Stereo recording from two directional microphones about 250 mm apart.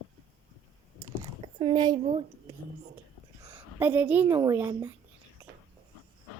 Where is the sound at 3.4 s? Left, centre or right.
Centre.